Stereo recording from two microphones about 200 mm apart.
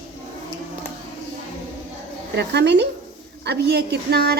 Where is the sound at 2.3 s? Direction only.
60° right (ahead or behind).